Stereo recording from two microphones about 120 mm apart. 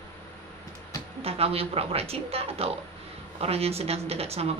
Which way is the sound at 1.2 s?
55° right (ahead or behind).